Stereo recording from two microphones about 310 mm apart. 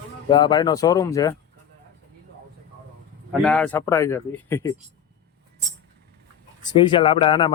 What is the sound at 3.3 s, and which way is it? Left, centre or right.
Speech, centre.